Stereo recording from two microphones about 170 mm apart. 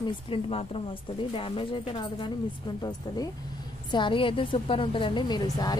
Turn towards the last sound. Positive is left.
turn(degrees=25)  # may be behind; listen again after turning